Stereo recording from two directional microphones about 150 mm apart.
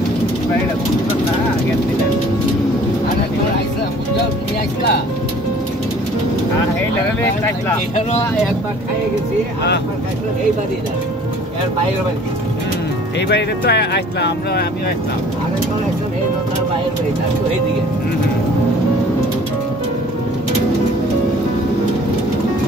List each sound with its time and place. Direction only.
13.3 s speech: 90° left